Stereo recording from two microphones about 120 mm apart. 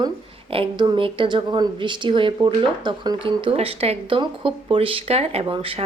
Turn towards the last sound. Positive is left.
turn(degrees=-50)  # may be behind; listen again after turning